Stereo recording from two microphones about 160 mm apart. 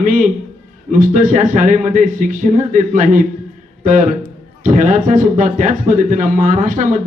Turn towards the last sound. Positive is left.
turn(degrees=-55)  # may be behind; listen again after turning